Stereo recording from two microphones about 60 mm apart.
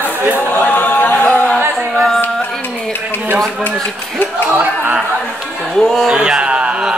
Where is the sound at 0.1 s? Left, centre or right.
Right.